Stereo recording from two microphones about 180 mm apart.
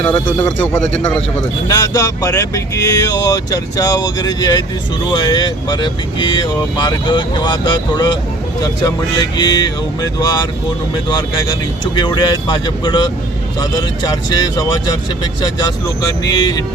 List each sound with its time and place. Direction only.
0.0 s speech: 10° left (ahead or behind)
1.6 s speech: 20° left (ahead or behind)
11.9 s speech: 25° left (ahead or behind)